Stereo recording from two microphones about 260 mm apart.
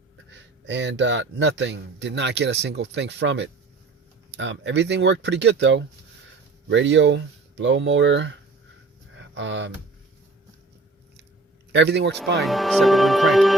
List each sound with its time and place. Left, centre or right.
0.3 s speech: right
9.1 s a sound: right
11.7 s a man's voice: right
12.4 s speech: centre